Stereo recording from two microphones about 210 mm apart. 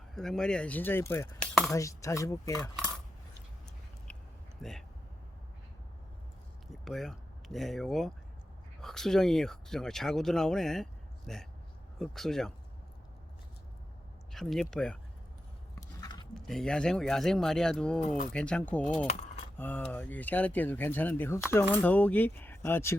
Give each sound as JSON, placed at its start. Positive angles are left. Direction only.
{"t": 0.1, "sound": "speech", "side_deg": 0}
{"t": 1.7, "sound": "speech", "side_deg": 15}
{"t": 4.6, "sound": "speech", "side_deg": 0}
{"t": 6.8, "sound": "speech", "side_deg": 0}
{"t": 14.3, "sound": "speech", "side_deg": 0}
{"t": 15.7, "sound": "a sound", "side_deg": 20}
{"t": 16.3, "sound": "speech", "side_deg": 5}